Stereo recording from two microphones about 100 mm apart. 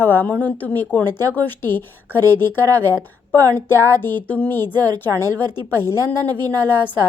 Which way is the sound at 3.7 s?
20° left (ahead or behind).